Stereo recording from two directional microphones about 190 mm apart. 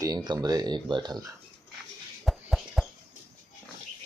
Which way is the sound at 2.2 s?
Centre (ahead or behind).